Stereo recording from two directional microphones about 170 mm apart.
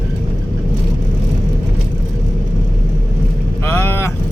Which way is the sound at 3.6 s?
10° left (ahead or behind).